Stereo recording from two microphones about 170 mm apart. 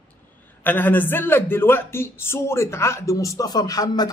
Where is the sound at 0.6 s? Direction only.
10° left (ahead or behind).